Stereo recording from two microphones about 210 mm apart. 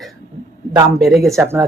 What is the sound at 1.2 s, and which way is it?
Speech, 15° right (ahead or behind).